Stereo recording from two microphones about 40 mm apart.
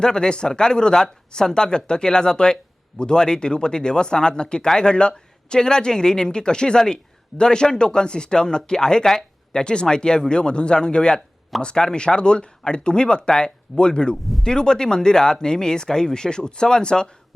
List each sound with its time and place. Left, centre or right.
0.0 s speech: centre